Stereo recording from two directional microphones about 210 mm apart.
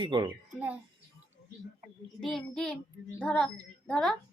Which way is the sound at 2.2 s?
Centre (ahead or behind).